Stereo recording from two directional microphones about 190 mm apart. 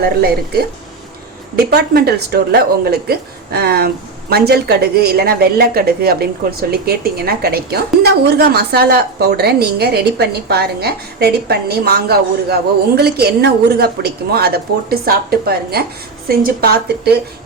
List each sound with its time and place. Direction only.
0.0 s speech: 55° right (ahead or behind)